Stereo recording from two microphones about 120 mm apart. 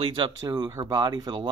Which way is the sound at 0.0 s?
40° right (ahead or behind).